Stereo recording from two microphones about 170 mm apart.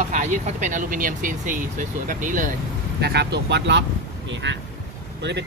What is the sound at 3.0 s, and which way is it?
Speech, 75° right (ahead or behind).